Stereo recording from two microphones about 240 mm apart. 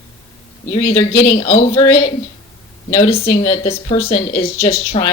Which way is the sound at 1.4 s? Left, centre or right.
Left.